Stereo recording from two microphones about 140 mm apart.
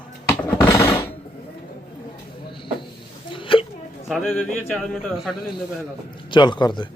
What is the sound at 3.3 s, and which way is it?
Hiccup, 40° left (ahead or behind).